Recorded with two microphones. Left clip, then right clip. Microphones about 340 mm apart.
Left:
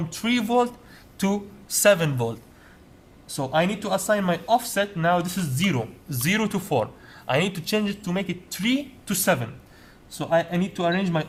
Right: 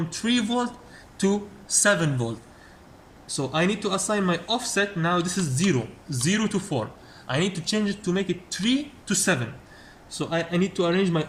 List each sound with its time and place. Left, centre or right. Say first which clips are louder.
0.1 s speech: left 4 dB; left